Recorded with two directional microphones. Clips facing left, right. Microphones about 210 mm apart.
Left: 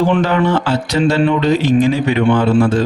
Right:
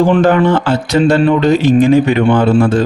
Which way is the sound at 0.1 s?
50° right (ahead or behind).